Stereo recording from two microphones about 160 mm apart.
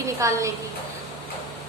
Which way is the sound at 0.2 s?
20° right (ahead or behind).